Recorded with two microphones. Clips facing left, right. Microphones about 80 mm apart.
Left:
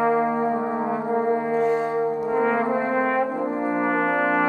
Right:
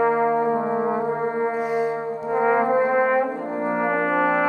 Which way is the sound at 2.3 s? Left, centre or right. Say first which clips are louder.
Right 5 dB; centre.